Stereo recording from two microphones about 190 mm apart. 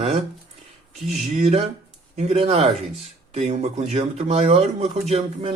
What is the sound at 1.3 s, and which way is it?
Speech, 40° right (ahead or behind).